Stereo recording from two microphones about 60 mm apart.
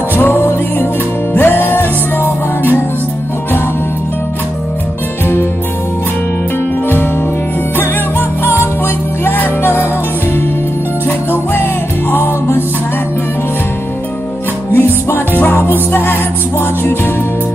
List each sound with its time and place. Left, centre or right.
0.1 s music: left
9.2 s music: left
12.1 s music: left
14.7 s music: left